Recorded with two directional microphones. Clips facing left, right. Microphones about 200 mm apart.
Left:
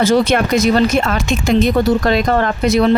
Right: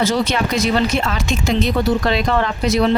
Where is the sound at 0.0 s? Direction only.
50° left (ahead or behind).